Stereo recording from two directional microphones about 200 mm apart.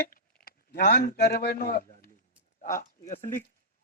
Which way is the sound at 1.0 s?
55° left (ahead or behind).